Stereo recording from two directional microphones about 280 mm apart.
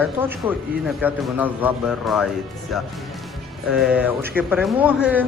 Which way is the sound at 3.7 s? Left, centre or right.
Centre.